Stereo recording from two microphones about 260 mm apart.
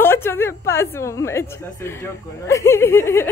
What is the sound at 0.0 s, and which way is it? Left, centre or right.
A woman's voice, centre.